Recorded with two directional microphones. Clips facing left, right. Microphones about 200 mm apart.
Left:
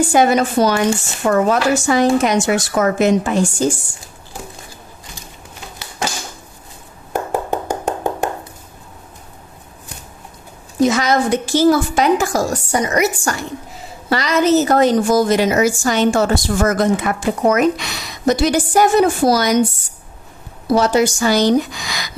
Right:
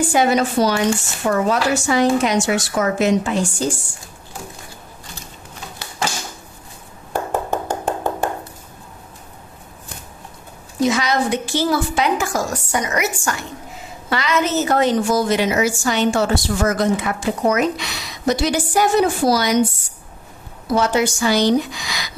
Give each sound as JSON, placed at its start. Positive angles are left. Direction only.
{"t": 0.1, "sound": "a woman's voice", "side_deg": 45}
{"t": 7.1, "sound": "hands", "side_deg": 15}
{"t": 10.9, "sound": "a woman's voice", "side_deg": 45}
{"t": 20.6, "sound": "a woman's voice", "side_deg": 35}